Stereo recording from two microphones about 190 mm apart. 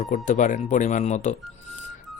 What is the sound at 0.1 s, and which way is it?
Speech, 40° left (ahead or behind).